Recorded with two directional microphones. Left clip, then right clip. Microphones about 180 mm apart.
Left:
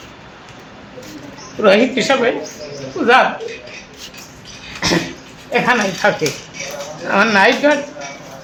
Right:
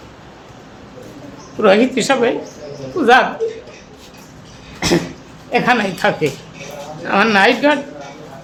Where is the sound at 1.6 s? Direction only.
30° right (ahead or behind).